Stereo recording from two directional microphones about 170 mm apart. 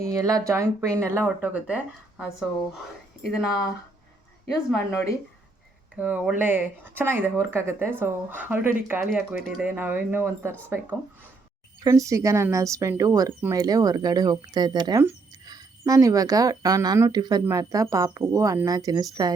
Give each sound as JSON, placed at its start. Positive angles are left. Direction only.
{"t": 0.0, "sound": "speech", "side_deg": -20}
{"t": 6.0, "sound": "speech", "side_deg": -10}